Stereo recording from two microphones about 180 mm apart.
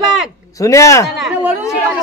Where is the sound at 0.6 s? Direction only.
15° left (ahead or behind).